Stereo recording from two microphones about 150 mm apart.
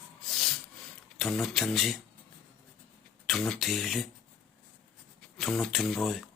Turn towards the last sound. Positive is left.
turn(degrees=0)  # may be behind; listen again after turning